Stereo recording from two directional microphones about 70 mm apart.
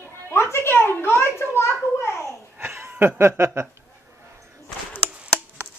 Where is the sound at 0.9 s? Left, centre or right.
Left.